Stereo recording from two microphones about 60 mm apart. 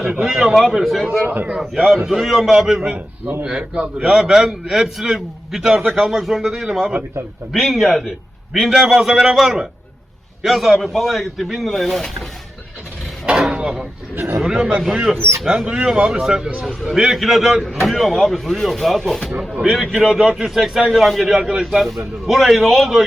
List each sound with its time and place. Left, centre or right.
0.2 s speech: centre
1.0 s a man's voice: centre
3.4 s a man's voice: centre
13.5 s a man's voice: centre
15.1 s speech: right
15.4 s a man's voice: centre